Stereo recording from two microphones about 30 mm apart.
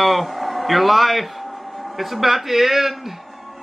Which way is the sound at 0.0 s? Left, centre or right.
Centre.